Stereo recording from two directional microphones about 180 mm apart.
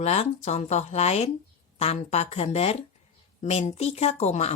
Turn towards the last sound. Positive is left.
turn(degrees=35)  # may be behind; listen again after turning